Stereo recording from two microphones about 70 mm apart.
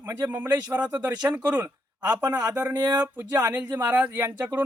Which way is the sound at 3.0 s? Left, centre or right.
Right.